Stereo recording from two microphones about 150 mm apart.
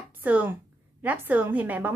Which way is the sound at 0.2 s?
10° right (ahead or behind).